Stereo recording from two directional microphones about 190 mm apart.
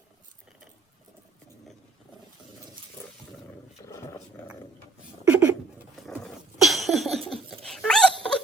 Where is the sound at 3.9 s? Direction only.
15° left (ahead or behind).